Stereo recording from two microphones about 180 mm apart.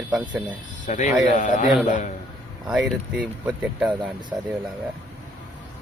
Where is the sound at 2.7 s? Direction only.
5° right (ahead or behind).